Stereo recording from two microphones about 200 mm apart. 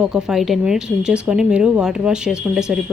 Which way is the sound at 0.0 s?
5° right (ahead or behind).